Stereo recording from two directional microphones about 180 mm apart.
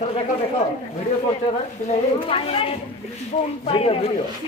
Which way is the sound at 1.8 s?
30° left (ahead or behind).